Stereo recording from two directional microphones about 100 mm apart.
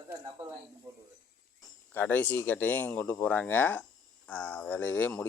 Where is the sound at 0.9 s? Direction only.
30° right (ahead or behind).